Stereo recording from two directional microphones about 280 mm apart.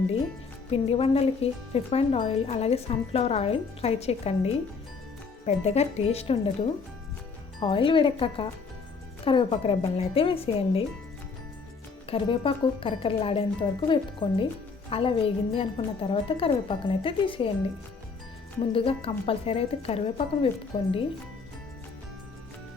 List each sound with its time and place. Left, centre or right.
0.7 s speech: left
5.5 s speech: left
7.6 s speech: centre
12.0 s speech: centre
18.7 s speech: centre